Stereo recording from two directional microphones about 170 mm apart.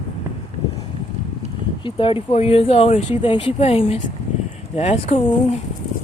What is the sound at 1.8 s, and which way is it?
Speech, 30° left (ahead or behind).